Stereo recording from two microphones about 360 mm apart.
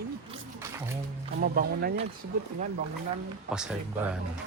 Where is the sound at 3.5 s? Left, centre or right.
Centre.